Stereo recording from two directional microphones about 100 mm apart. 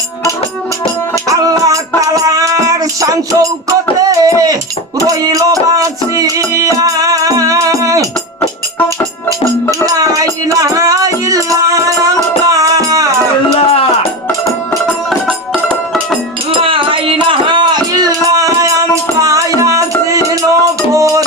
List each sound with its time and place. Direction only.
1.3 s music: 35° right (ahead or behind)
9.8 s music: 35° right (ahead or behind)
13.6 s music: 75° left (ahead or behind)
16.5 s music: 60° right (ahead or behind); by 19.8 s 30° right (ahead or behind)
20.1 s a sound: 35° right (ahead or behind)